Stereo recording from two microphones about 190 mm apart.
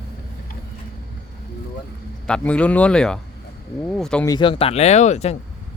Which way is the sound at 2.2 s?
5° left (ahead or behind).